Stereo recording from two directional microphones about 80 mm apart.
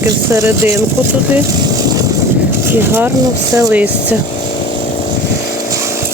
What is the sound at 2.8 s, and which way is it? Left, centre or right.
Speech, right.